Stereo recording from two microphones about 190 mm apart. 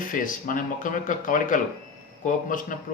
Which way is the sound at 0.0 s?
45° left (ahead or behind).